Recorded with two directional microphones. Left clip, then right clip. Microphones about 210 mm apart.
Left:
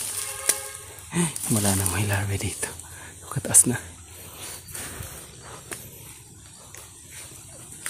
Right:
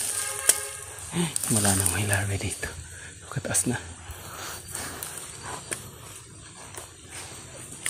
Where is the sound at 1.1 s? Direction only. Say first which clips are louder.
Left 1 dB; 25° left (ahead or behind).